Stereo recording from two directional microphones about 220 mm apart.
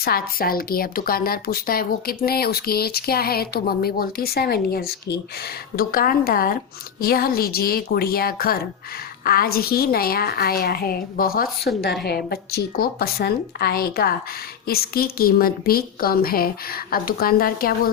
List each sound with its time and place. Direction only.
0.0 s speech: 40° left (ahead or behind)